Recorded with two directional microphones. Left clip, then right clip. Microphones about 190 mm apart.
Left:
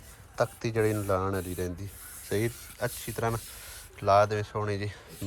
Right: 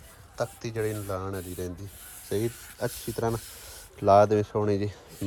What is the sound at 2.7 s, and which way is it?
Speech, 30° right (ahead or behind).